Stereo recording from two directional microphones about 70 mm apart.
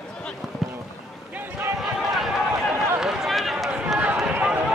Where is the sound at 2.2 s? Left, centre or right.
Centre.